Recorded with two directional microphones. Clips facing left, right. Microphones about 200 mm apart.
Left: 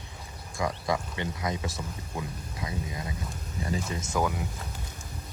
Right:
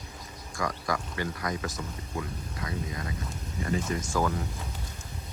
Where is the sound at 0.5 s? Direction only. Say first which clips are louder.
Left 2 dB; 25° left (ahead or behind).